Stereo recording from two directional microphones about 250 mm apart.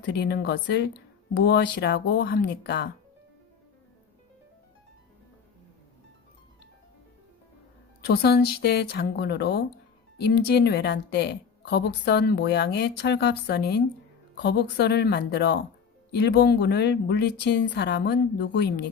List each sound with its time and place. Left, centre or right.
0.0 s a woman's voice: left
8.0 s a woman's voice: left